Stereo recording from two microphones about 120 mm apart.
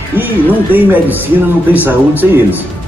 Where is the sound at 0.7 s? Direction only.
15° right (ahead or behind).